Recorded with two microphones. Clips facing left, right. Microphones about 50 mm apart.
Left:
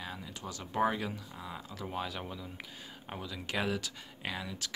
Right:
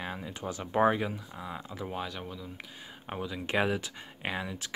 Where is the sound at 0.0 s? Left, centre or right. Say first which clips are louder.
Right 5 dB; right.